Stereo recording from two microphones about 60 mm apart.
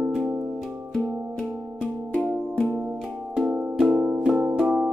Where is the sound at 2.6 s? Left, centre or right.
Centre.